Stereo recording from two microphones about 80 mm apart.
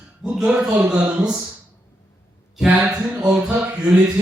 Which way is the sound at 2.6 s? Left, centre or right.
Centre.